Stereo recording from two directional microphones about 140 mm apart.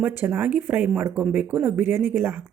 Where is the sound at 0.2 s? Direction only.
15° right (ahead or behind).